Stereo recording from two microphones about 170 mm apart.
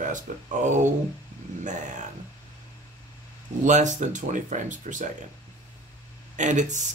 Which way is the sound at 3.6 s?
45° right (ahead or behind).